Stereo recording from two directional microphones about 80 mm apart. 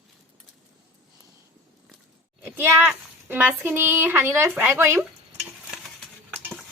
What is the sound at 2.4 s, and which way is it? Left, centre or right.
Speech, right.